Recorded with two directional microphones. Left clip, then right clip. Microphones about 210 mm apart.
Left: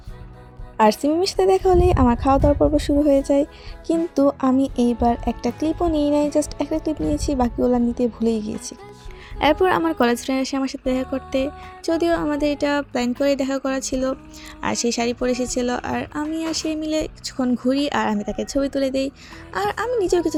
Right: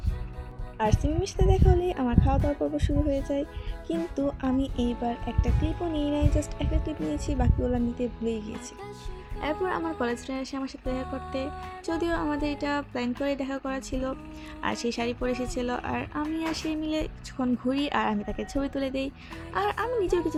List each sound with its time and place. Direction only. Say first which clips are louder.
0.8 s a woman's voice: left 11 dB; 35° left (ahead or behind)
5.1 s speech: left 10 dB; centre (ahead or behind)
5.9 s a woman's voice: left 9 dB; 35° left (ahead or behind)